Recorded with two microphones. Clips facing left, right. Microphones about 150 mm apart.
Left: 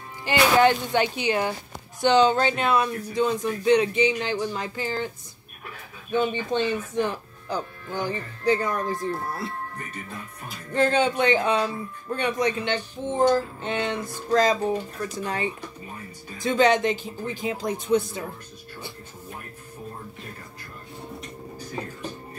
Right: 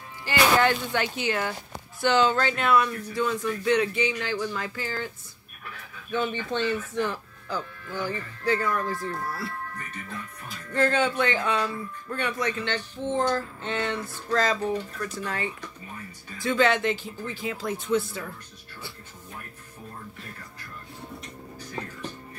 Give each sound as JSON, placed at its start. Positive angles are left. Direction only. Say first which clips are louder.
{"t": 0.2, "sound": "speech", "louder": "left 3 dB", "side_deg": 20}
{"t": 6.1, "sound": "speech", "louder": "left 4 dB", "side_deg": 15}
{"t": 10.7, "sound": "speech", "louder": "left 2 dB", "side_deg": 20}